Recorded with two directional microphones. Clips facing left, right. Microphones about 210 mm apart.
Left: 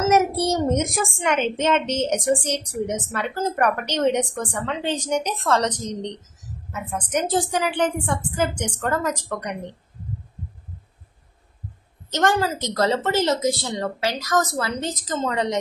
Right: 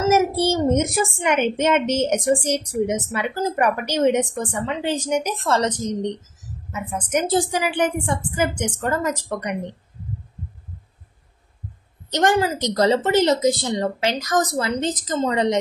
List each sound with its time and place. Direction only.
0.1 s a child's voice: centre (ahead or behind)
12.1 s a woman's voice: 15° right (ahead or behind)